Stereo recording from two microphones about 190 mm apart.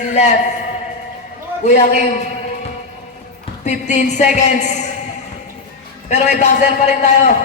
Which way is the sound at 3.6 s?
40° left (ahead or behind).